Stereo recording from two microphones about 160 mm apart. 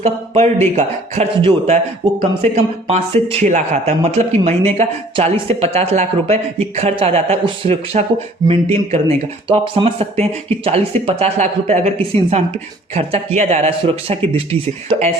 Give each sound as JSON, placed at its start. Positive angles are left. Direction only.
{"t": 0.0, "sound": "speech", "side_deg": -45}